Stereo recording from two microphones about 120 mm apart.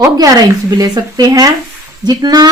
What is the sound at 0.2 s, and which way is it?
Speech, 35° right (ahead or behind).